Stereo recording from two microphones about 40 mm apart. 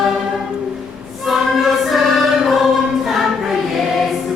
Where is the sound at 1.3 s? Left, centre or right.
Centre.